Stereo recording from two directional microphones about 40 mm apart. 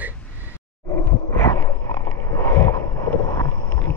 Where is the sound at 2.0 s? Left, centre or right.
Left.